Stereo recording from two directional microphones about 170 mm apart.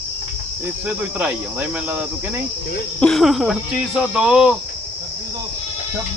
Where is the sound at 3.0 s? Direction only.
5° left (ahead or behind).